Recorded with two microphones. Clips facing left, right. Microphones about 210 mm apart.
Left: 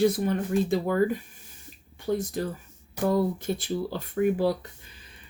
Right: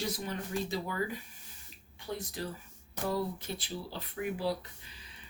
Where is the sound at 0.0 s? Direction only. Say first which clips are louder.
Left 13 dB; 55° left (ahead or behind).